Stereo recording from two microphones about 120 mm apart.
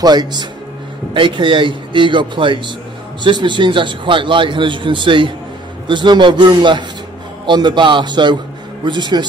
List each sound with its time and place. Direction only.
0.0 s a man's voice: 35° right (ahead or behind)